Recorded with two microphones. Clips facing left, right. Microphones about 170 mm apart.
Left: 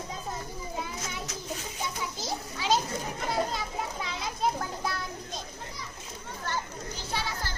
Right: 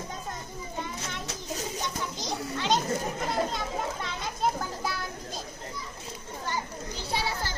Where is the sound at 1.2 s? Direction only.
40° right (ahead or behind).